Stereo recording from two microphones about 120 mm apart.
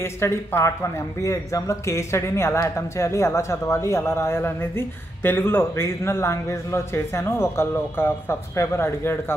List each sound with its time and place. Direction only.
0.0 s speech: 20° left (ahead or behind)